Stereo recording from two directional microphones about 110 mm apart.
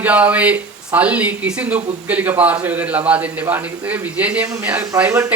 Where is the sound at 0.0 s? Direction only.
15° right (ahead or behind).